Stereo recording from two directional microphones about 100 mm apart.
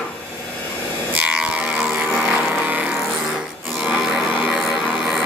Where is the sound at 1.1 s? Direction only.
10° right (ahead or behind).